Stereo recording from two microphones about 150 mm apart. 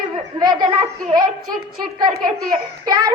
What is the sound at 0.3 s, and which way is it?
A child's voice, 25° right (ahead or behind).